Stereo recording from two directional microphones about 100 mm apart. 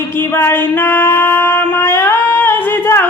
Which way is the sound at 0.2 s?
20° left (ahead or behind).